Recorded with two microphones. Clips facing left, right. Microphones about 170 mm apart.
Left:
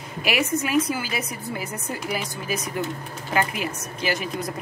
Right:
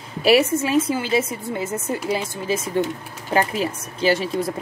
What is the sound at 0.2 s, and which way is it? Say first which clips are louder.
A woman's voice: right 8 dB; 35° right (ahead or behind).